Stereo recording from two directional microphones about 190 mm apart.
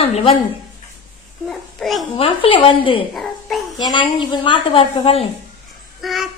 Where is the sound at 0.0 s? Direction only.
35° left (ahead or behind).